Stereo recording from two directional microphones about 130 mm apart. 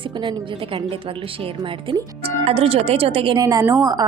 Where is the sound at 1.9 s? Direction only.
50° right (ahead or behind).